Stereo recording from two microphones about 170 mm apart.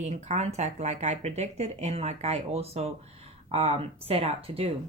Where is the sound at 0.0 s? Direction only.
45° right (ahead or behind).